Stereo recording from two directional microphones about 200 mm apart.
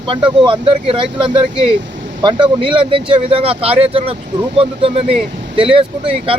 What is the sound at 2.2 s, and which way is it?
Speech, 20° right (ahead or behind).